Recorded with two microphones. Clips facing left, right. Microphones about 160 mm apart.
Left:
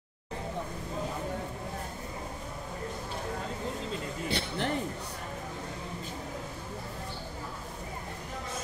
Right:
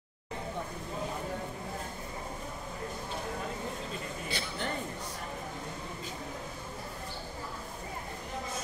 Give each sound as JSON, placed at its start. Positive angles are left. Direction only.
{"t": 4.3, "sound": "speech", "side_deg": 65}